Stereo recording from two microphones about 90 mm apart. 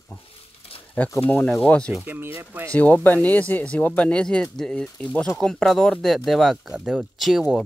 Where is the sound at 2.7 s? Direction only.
15° left (ahead or behind).